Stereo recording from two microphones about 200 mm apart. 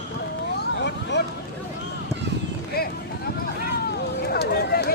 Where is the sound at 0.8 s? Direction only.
60° left (ahead or behind).